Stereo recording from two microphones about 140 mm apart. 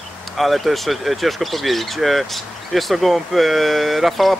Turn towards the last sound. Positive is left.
turn(degrees=0)  # may be behind; listen again after turning